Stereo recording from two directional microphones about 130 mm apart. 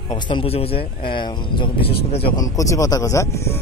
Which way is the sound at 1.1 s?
35° left (ahead or behind).